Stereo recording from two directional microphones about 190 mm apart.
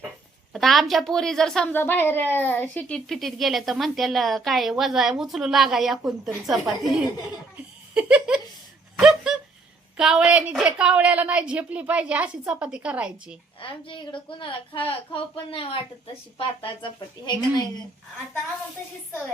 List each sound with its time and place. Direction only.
0.5 s a woman's voice: centre (ahead or behind)
7.9 s a sound: 10° right (ahead or behind)
10.0 s a woman's voice: 5° right (ahead or behind)
13.6 s a woman's voice: 25° left (ahead or behind)